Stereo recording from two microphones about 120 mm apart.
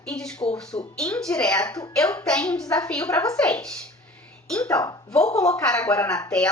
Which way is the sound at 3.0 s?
25° left (ahead or behind).